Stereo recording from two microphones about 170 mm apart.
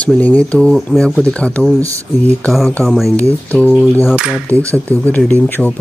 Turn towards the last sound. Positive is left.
turn(degrees=10)  # may be behind; listen again after turning